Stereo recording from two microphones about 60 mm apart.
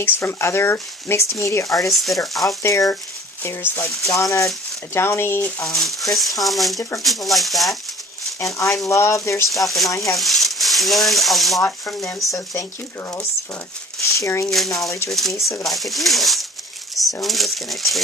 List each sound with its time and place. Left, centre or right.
0.0 s speech: left
1.4 s speech: left
1.9 s speech: centre
2.6 s speech: left
3.4 s speech: left
3.8 s speech: centre
4.1 s speech: left
4.9 s speech: left
5.6 s speech: centre
8.5 s speech: left
9.5 s speech: centre
14.4 s speech: centre